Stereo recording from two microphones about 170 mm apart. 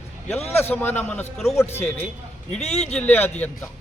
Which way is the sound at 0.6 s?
10° left (ahead or behind).